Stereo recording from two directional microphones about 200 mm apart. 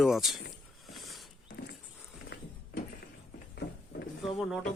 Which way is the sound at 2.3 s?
60° left (ahead or behind).